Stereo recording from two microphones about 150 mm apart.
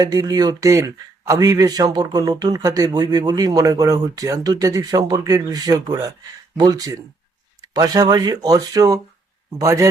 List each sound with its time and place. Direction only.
0.0 s speech: 25° right (ahead or behind)